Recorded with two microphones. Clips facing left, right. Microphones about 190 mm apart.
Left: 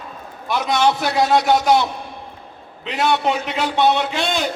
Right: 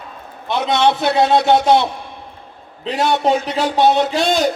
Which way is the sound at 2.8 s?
35° right (ahead or behind).